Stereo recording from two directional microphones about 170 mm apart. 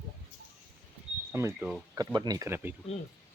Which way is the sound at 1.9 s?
20° right (ahead or behind).